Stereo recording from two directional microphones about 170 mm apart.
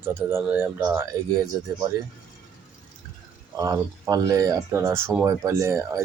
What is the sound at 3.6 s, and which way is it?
A man's voice, 20° right (ahead or behind).